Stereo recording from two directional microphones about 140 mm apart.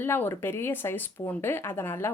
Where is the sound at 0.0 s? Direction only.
15° left (ahead or behind).